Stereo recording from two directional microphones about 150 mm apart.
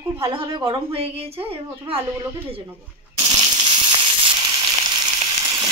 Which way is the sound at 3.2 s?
30° right (ahead or behind).